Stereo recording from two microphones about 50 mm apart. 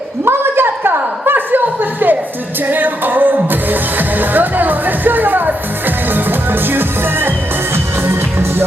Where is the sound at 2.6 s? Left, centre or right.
Right.